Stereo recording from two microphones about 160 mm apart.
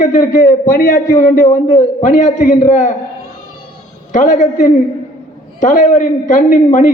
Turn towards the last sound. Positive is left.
turn(degrees=50)  # may be behind; listen again after turning